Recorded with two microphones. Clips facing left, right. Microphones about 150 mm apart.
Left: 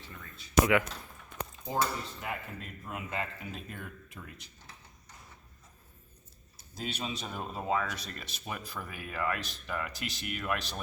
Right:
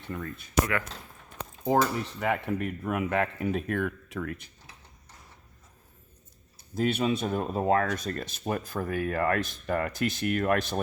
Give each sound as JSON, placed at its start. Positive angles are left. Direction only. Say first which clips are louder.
{"t": 0.0, "sound": "speech", "louder": "right 13 dB", "side_deg": -55}
{"t": 0.6, "sound": "speech", "louder": "left 4 dB", "side_deg": 15}
{"t": 1.6, "sound": "speech", "louder": "right 8 dB", "side_deg": -70}
{"t": 6.7, "sound": "speech", "louder": "right 11 dB", "side_deg": -55}